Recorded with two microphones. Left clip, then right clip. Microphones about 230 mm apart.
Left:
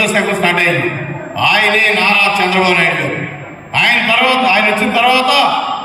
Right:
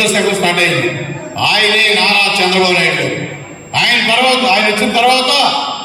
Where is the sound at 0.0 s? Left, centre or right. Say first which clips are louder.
Even; right.